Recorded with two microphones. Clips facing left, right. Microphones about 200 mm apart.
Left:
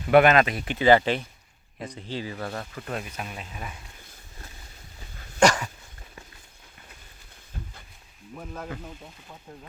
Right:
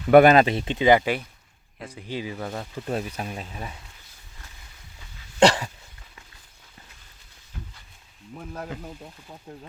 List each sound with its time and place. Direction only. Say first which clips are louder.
0.1 s speech: right 4 dB; 35° right (ahead or behind); by 2.9 s 15° right (ahead or behind)
2.9 s speech: right 5 dB; 35° right (ahead or behind)
4.9 s dog: left 4 dB; 50° left (ahead or behind)
5.4 s dog: right 2 dB; 30° right (ahead or behind)